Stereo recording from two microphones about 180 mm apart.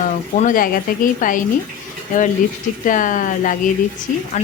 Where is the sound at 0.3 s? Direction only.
50° left (ahead or behind).